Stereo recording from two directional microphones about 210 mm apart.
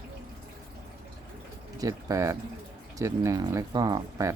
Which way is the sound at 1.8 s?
15° right (ahead or behind).